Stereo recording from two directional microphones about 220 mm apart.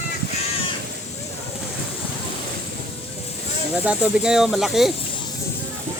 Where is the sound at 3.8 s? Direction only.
5° right (ahead or behind).